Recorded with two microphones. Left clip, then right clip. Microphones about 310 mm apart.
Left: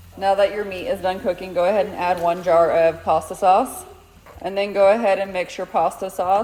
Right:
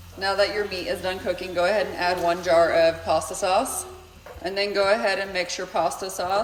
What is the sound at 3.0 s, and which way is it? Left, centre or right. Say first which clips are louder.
A man's voice: left 6 dB; centre.